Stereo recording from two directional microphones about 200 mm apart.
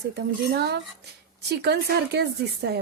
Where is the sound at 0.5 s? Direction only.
55° right (ahead or behind).